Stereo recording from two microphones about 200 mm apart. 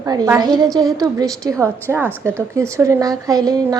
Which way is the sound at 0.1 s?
20° right (ahead or behind).